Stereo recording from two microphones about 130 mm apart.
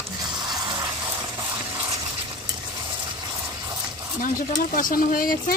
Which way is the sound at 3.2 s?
30° right (ahead or behind).